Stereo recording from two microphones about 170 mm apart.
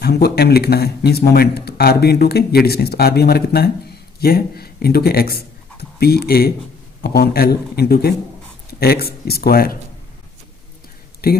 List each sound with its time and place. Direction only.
0.0 s speech: 70° left (ahead or behind)
11.2 s speech: 65° left (ahead or behind)